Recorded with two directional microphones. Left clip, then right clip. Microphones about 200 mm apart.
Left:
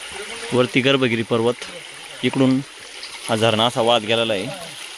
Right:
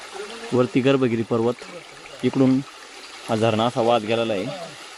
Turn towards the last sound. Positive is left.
turn(degrees=0)  # may be behind; listen again after turning